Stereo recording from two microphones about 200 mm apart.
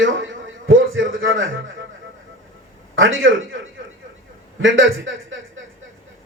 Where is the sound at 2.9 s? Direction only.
80° right.